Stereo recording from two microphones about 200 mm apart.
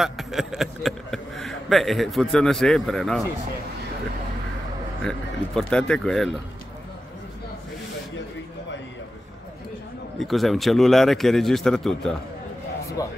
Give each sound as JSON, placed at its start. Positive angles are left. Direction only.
{"t": 0.0, "sound": "a man's voice", "side_deg": 0}
{"t": 5.0, "sound": "a man's voice", "side_deg": 5}
{"t": 10.1, "sound": "a man's voice", "side_deg": 0}
{"t": 13.0, "sound": "speech", "side_deg": 20}